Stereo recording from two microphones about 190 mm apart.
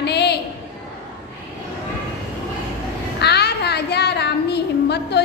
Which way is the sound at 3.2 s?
60° left (ahead or behind).